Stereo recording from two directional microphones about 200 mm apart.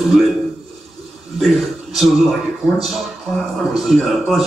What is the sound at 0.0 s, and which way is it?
Speech, centre (ahead or behind).